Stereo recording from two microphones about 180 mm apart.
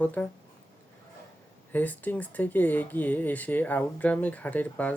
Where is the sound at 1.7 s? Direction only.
10° left (ahead or behind).